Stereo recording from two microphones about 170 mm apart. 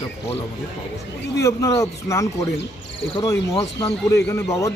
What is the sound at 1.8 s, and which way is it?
A man's voice, 20° left (ahead or behind).